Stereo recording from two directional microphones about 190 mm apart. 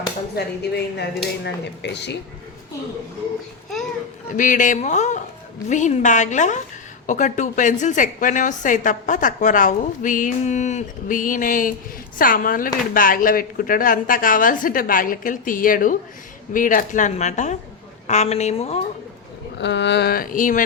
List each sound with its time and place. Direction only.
0.3 s mantra: 60° left (ahead or behind)
4.3 s a woman's voice: 40° left (ahead or behind)
19.5 s mantra: 65° left (ahead or behind); by 20.7 s 45° left (ahead or behind)